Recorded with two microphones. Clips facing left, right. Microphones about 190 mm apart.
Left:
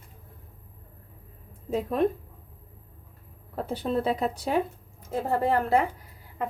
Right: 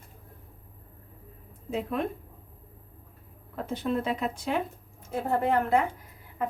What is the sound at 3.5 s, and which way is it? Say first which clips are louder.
A woman's voice: left 2 dB; 35° left (ahead or behind).